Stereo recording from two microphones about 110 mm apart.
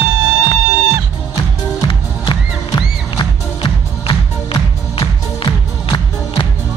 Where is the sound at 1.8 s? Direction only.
50° left (ahead or behind).